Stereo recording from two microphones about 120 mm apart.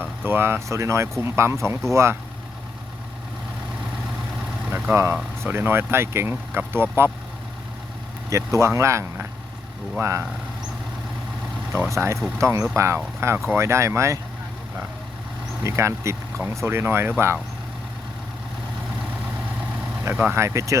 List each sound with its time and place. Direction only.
0.3 s speech: 20° right (ahead or behind)
4.7 s vehicle: 20° right (ahead or behind)
5.4 s speech: 20° right (ahead or behind)
8.3 s speech: 25° right (ahead or behind)
11.7 s speech: 20° right (ahead or behind)
15.6 s speech: 25° right (ahead or behind)
20.1 s speech: 20° right (ahead or behind)